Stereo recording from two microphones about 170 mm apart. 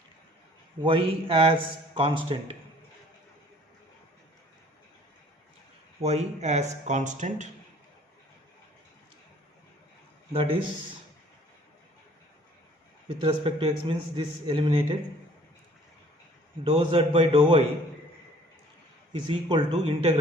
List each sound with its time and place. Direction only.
0.8 s a man's voice: 35° right (ahead or behind)
6.0 s a man's voice: 40° right (ahead or behind)
10.3 s a man's voice: 30° right (ahead or behind)
13.1 s a man's voice: 35° right (ahead or behind)
16.6 s a man's voice: 30° right (ahead or behind)
19.3 s a man's voice: 30° right (ahead or behind)